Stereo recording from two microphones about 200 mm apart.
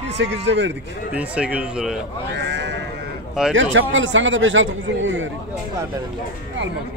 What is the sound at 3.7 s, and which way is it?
A man's voice, 70° right (ahead or behind).